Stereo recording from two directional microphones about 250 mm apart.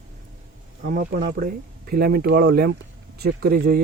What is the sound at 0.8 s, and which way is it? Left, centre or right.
Speech, right.